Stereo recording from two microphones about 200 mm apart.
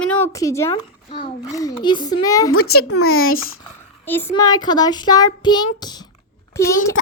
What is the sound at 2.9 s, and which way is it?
Speech, 90° left.